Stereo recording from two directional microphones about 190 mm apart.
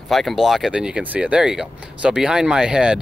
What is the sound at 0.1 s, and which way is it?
Speech, centre (ahead or behind).